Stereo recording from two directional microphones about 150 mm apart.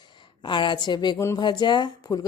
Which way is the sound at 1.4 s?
30° left (ahead or behind).